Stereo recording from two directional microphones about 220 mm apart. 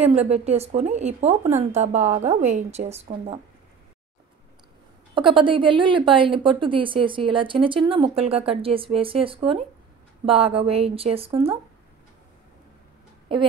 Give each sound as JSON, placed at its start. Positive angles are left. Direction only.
{"t": 0.0, "sound": "a woman's voice", "side_deg": -30}
{"t": 5.1, "sound": "a woman's voice", "side_deg": -20}